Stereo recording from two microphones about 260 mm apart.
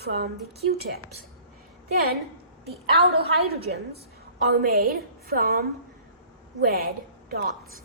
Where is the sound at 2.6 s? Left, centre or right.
Right.